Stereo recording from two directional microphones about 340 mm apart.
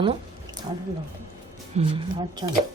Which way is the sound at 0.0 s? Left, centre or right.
Centre.